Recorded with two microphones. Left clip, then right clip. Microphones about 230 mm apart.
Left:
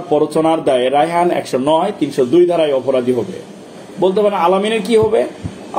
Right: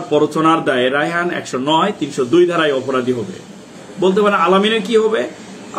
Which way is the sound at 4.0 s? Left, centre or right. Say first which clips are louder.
Even; centre.